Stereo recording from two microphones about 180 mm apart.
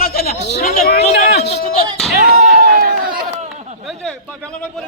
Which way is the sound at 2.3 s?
55° right (ahead or behind).